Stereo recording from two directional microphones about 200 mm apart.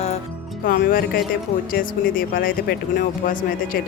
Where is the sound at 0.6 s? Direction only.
45° left (ahead or behind).